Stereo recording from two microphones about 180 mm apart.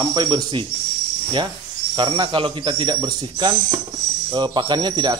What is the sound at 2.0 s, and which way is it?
Speech, 25° right (ahead or behind).